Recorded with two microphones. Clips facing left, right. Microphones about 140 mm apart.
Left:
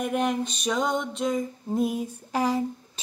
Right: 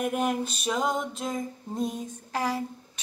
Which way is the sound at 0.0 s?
5° right (ahead or behind).